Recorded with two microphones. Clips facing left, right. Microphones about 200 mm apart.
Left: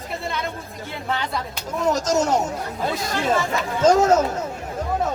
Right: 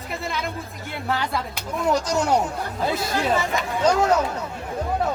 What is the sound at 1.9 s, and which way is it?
Speech, 45° left (ahead or behind).